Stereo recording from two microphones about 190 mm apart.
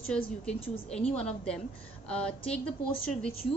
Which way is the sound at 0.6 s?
30° left (ahead or behind).